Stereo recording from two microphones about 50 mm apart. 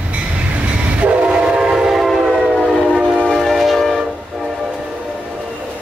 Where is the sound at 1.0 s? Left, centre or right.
Right.